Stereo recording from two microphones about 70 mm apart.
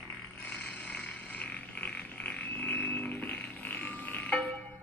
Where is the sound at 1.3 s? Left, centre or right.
Left.